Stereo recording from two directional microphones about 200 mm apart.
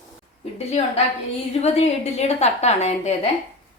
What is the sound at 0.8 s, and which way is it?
A woman's voice, 35° left (ahead or behind).